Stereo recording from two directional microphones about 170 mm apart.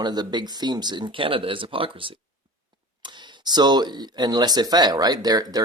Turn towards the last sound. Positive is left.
turn(degrees=-20)  # may be behind; listen again after turning